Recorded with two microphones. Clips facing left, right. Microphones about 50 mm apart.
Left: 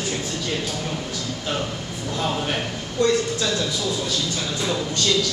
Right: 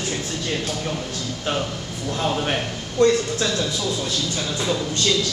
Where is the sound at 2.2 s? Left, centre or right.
Centre.